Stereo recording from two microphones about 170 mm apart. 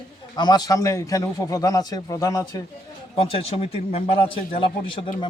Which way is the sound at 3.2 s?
35° left (ahead or behind).